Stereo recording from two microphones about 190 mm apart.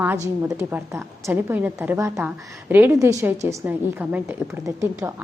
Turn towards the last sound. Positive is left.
turn(degrees=-15)  # may be behind; listen again after turning